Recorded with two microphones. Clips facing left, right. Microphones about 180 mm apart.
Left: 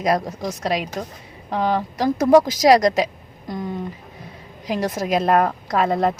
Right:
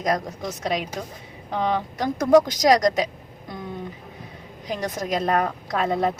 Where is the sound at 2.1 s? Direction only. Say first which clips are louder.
Left 2 dB; 5° left (ahead or behind).